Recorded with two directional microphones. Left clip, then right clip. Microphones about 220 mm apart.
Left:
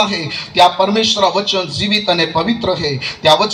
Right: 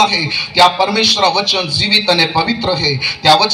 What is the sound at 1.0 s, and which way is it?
A man's voice, 60° left (ahead or behind).